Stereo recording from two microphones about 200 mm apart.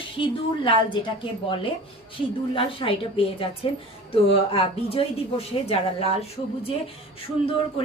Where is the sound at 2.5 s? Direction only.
25° left (ahead or behind).